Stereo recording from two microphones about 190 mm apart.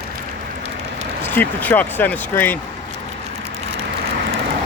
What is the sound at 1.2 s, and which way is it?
Speech, 10° left (ahead or behind).